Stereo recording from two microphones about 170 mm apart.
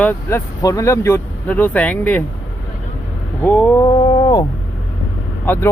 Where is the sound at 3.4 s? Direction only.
10° left (ahead or behind).